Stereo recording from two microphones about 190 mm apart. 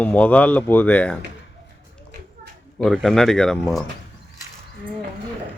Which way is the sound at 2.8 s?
Centre (ahead or behind).